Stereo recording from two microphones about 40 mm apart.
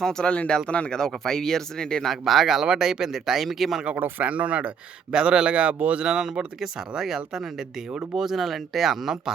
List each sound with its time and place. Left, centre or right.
0.0 s speech: centre
0.3 s speech: left
1.2 s speech: centre
2.0 s speech: centre
4.2 s speech: right
5.1 s a man's voice: right
6.1 s speech: centre